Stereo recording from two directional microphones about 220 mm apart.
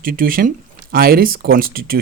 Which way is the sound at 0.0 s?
40° right (ahead or behind).